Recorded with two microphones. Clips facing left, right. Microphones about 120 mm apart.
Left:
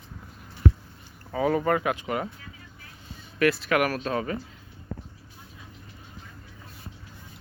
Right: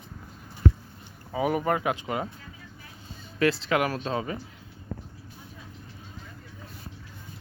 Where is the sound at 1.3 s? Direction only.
15° right (ahead or behind).